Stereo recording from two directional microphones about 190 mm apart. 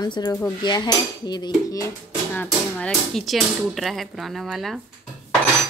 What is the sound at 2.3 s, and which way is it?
Speech, 5° left (ahead or behind).